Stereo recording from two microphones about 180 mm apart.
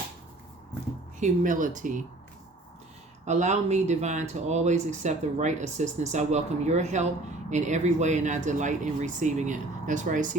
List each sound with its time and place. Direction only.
1.2 s speech: 45° right (ahead or behind)
3.2 s speech: 40° right (ahead or behind)